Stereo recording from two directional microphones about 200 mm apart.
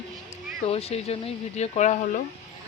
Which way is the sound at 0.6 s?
30° left (ahead or behind).